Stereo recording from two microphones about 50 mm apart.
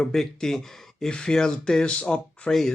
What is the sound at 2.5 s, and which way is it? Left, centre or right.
Speech, centre.